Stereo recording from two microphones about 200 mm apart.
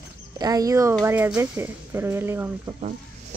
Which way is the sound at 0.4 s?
20° right (ahead or behind).